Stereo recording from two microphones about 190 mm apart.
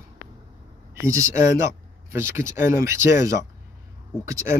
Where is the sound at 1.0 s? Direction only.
15° right (ahead or behind).